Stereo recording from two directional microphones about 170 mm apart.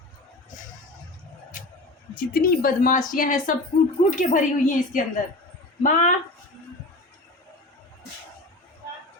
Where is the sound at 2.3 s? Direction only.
60° left (ahead or behind).